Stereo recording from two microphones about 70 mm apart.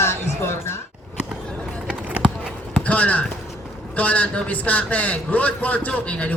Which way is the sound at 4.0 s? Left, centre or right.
Left.